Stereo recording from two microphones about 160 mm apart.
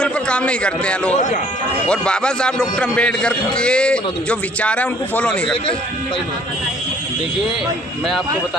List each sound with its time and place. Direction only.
0.0 s a man's voice: 5° left (ahead or behind)
1.1 s speech: 50° left (ahead or behind)
1.9 s a man's voice: 5° left (ahead or behind)